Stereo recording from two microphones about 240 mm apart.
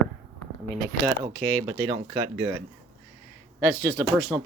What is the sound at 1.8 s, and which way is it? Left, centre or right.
Speech, centre.